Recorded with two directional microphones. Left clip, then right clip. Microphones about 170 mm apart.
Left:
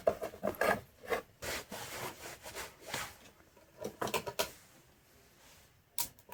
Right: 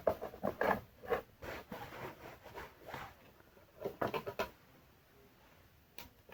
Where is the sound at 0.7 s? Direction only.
20° left (ahead or behind).